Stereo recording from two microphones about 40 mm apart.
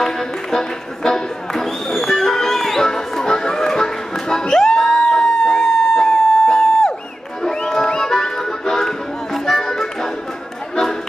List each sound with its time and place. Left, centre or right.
0.0 s a sound: centre
6.0 s siren: centre
7.5 s music: centre